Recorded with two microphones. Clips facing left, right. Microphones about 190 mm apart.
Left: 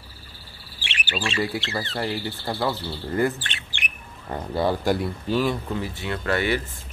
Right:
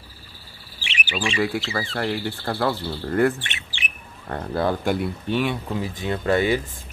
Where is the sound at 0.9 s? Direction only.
10° right (ahead or behind).